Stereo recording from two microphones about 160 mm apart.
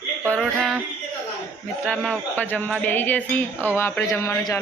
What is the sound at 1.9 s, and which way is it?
A woman's voice, 10° left (ahead or behind).